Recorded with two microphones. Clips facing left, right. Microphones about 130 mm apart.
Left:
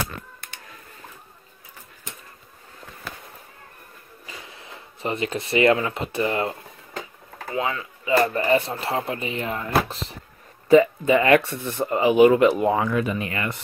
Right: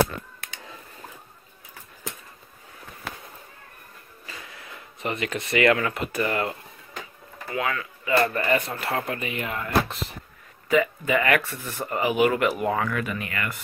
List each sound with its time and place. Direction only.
4.5 s speech: 25° left (ahead or behind)
7.5 s speech: 20° left (ahead or behind)